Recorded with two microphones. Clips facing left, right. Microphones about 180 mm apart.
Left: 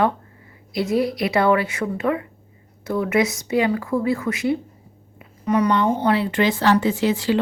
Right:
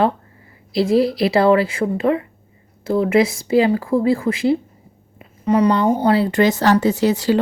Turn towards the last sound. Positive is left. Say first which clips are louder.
# right 3 dB
turn(degrees=-40)  # may be behind; listen again after turning